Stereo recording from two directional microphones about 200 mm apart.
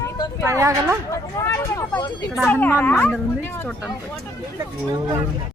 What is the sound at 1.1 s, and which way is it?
A woman's voice, 15° left (ahead or behind).